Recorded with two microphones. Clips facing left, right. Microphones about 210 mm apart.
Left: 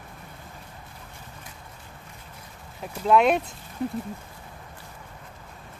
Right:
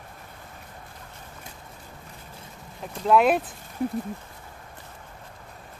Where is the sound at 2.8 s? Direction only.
Centre (ahead or behind).